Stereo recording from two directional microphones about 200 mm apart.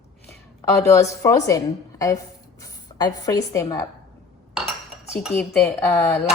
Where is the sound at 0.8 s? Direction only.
15° left (ahead or behind).